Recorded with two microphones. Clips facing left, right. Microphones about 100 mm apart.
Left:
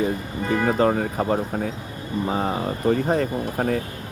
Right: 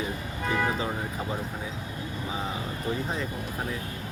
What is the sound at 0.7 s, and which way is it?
Speech, 60° left (ahead or behind).